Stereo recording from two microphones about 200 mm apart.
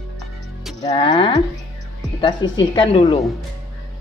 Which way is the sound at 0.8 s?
20° left (ahead or behind).